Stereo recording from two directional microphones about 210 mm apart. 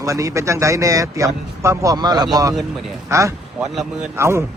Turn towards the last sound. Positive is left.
turn(degrees=-10)  # may be behind; listen again after turning